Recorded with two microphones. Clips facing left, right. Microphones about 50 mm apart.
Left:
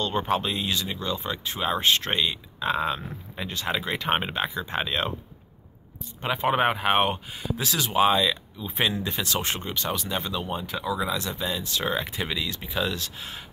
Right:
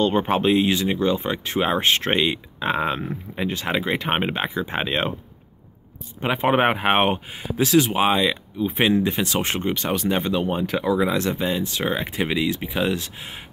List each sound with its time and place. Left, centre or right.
0.0 s speech: right
6.2 s speech: right